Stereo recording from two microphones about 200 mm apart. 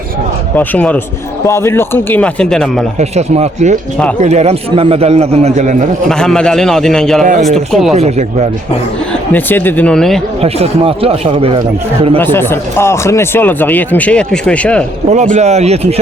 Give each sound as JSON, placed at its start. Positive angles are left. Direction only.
{"t": 0.5, "sound": "speech", "side_deg": 10}
{"t": 3.0, "sound": "a man's voice", "side_deg": -35}
{"t": 6.1, "sound": "a man's voice", "side_deg": 5}
{"t": 7.3, "sound": "a man's voice", "side_deg": -40}
{"t": 7.5, "sound": "a man's voice", "side_deg": 0}
{"t": 7.9, "sound": "a man's voice", "side_deg": -35}
{"t": 9.3, "sound": "speech", "side_deg": 10}
{"t": 10.4, "sound": "speech", "side_deg": -30}
{"t": 12.2, "sound": "speech", "side_deg": 10}
{"t": 15.1, "sound": "a man's voice", "side_deg": -35}